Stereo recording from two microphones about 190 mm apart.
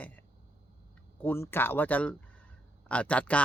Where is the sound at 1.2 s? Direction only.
10° left (ahead or behind).